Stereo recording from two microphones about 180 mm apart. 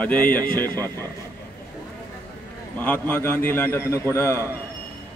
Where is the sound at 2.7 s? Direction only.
10° left (ahead or behind).